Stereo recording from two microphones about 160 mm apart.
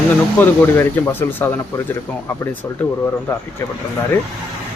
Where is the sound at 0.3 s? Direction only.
15° left (ahead or behind).